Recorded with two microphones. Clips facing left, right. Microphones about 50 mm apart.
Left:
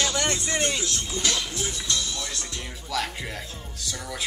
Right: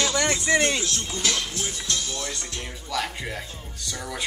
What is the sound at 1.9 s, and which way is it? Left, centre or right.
Music, right.